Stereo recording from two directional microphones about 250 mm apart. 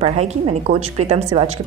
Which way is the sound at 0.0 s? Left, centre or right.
Right.